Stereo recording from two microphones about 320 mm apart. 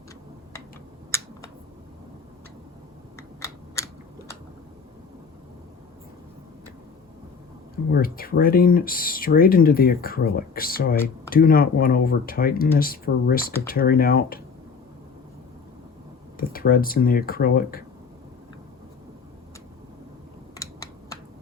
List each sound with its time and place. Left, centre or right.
1.1 s a sound: centre
3.2 s computer keyboard: centre
7.9 s speech: left
16.4 s speech: left
20.6 s computer keyboard: centre